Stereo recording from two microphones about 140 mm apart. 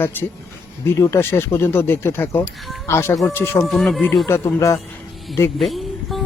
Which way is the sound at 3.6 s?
Centre (ahead or behind).